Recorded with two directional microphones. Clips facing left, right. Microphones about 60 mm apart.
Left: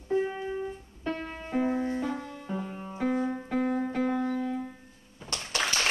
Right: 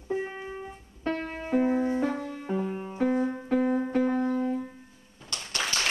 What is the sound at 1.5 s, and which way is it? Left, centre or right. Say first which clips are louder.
Music: right 3 dB; right.